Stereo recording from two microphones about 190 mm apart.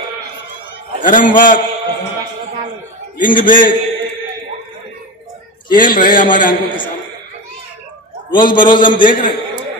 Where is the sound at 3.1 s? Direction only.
45° left (ahead or behind).